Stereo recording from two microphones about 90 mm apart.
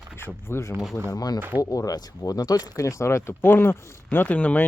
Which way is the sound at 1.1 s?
45° left (ahead or behind).